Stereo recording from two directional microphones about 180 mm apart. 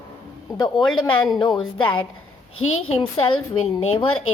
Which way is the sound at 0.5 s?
25° left (ahead or behind).